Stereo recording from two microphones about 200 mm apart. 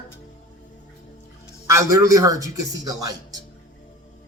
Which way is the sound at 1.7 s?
15° right (ahead or behind).